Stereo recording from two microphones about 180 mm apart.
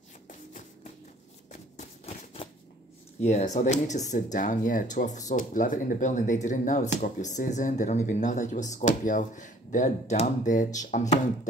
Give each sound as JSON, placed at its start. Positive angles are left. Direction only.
{"t": 1.5, "sound": "shuffling cards", "side_deg": 35}
{"t": 3.3, "sound": "speech", "side_deg": 40}